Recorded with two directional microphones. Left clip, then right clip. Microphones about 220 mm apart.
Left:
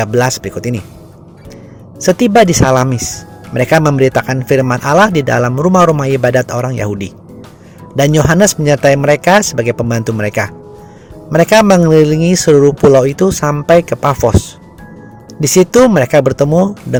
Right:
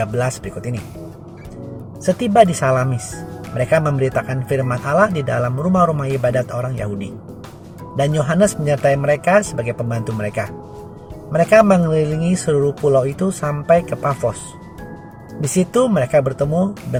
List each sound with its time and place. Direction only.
0.0 s speech: 45° left (ahead or behind)
2.0 s speech: 45° left (ahead or behind)
7.9 s speech: 45° left (ahead or behind)
15.5 s speech: 45° left (ahead or behind)